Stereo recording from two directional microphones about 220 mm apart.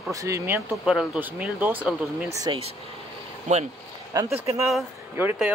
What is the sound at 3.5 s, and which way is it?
Speech, 35° right (ahead or behind).